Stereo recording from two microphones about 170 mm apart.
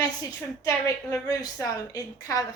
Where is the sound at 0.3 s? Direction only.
20° left (ahead or behind).